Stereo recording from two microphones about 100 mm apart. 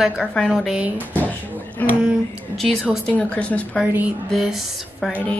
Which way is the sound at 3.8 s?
20° right (ahead or behind).